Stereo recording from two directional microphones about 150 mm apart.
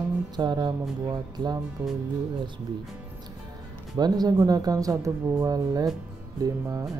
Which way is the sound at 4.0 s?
25° right (ahead or behind).